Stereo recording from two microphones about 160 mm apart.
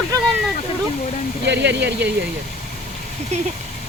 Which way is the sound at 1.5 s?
90° right.